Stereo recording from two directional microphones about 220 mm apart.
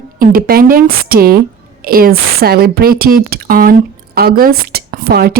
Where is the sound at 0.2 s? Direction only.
40° right (ahead or behind).